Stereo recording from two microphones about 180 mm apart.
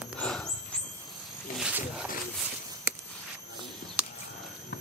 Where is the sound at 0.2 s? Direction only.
5° left (ahead or behind).